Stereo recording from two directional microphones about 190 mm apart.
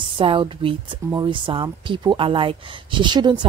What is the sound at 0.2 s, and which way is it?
Speech, 25° right (ahead or behind).